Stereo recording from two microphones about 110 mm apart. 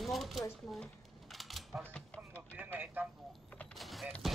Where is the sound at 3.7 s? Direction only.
Centre (ahead or behind).